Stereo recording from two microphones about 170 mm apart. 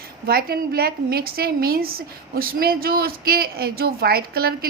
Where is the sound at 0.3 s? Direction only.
65° right (ahead or behind).